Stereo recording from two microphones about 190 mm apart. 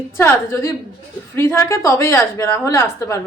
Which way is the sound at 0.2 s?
15° left (ahead or behind).